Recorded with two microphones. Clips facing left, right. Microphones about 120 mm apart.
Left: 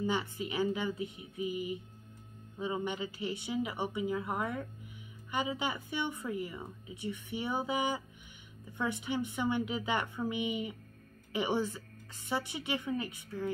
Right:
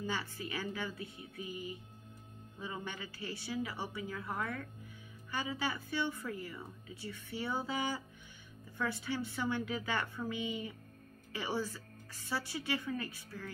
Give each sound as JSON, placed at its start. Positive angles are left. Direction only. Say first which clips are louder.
{"t": 0.0, "sound": "a woman's voice", "louder": "left 6 dB", "side_deg": 20}